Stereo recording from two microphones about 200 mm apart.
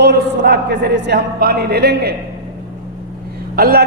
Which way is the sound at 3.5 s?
50° right (ahead or behind).